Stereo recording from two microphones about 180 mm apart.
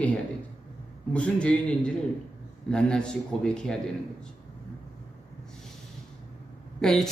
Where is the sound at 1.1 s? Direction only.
5° left (ahead or behind).